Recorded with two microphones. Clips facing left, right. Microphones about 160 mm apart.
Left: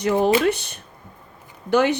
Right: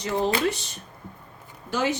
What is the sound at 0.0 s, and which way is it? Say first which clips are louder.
Speech: left 6 dB; 60° left (ahead or behind).